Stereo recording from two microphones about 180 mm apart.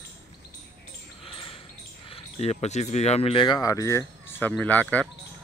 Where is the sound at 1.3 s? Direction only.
30° left (ahead or behind).